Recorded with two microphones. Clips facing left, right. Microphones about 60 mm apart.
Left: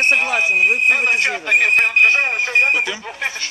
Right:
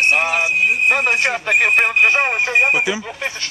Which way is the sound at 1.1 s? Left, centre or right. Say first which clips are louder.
Right 1 dB; right.